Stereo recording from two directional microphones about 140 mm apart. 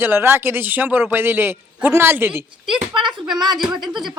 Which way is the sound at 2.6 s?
35° right (ahead or behind).